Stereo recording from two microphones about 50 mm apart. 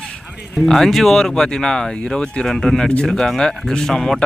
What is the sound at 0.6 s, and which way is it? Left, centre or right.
Speech, centre.